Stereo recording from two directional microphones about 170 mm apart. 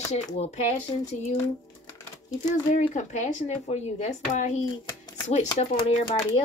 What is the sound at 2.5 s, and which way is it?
Speech, 45° left (ahead or behind).